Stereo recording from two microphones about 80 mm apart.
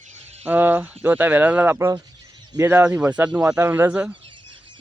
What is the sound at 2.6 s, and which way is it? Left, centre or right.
Speech, right.